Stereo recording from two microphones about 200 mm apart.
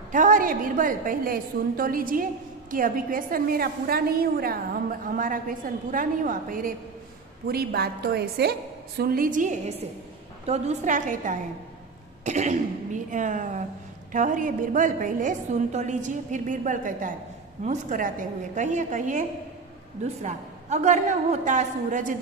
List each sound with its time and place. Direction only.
0.1 s a woman's voice: 40° right (ahead or behind)